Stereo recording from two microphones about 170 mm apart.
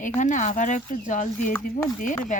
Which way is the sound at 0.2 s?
45° left (ahead or behind).